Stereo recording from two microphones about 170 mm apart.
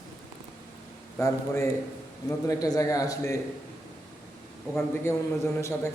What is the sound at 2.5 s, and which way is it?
Speech, 20° left (ahead or behind).